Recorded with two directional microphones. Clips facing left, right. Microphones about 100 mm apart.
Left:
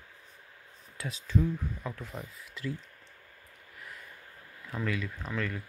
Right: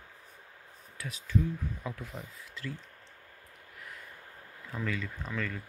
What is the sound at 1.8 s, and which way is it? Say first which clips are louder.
Speech: even; 5° right (ahead or behind).